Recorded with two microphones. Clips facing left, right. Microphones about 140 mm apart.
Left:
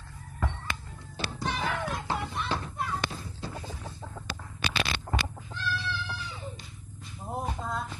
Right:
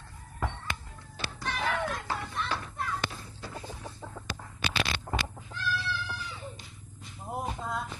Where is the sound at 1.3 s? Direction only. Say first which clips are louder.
Even; 20° left (ahead or behind).